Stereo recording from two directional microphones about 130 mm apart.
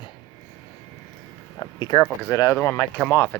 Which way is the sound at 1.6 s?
30° left (ahead or behind).